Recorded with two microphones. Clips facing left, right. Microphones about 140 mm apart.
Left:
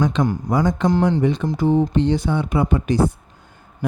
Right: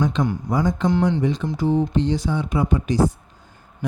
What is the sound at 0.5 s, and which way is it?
Speech, 75° left (ahead or behind).